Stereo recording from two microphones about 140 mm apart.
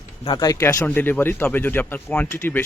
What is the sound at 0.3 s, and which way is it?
A man's voice, 25° left (ahead or behind).